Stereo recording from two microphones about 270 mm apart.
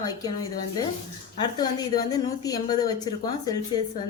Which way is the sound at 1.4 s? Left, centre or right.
Centre.